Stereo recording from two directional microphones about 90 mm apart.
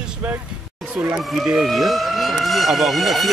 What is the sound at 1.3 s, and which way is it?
Speech, 5° right (ahead or behind).